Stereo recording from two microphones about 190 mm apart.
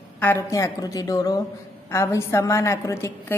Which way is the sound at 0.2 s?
15° left (ahead or behind).